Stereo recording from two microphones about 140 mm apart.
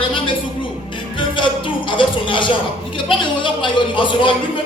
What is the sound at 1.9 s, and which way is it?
A man's voice, 35° left (ahead or behind).